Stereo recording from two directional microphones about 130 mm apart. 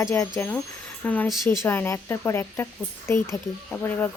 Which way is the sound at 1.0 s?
10° left (ahead or behind).